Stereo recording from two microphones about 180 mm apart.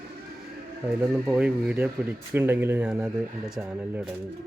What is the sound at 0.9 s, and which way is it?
Speech, 5° right (ahead or behind).